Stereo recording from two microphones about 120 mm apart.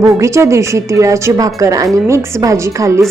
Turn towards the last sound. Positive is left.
turn(degrees=-25)  # may be behind; listen again after turning